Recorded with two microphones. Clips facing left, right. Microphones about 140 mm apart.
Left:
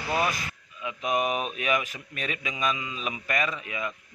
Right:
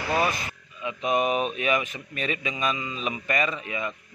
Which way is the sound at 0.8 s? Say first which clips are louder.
Right 3 dB; centre (ahead or behind).